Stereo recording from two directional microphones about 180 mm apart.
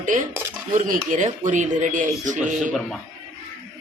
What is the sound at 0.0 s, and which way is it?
Speech, 45° right (ahead or behind).